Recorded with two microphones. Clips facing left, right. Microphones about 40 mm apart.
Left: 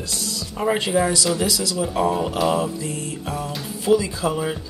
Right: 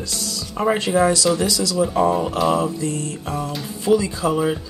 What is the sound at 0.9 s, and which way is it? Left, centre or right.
Speech, right.